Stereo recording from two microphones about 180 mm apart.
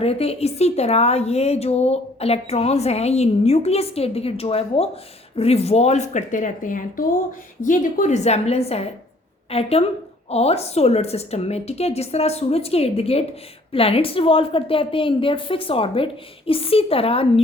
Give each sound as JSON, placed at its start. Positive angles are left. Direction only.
{"t": 0.0, "sound": "speech", "side_deg": 35}